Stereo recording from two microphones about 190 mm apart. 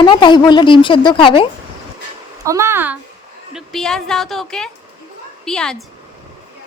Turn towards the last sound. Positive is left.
turn(degrees=5)  # may be behind; listen again after turning